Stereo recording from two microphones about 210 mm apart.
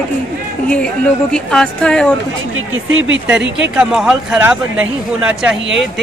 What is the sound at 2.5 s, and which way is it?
Speech, 70° right (ahead or behind).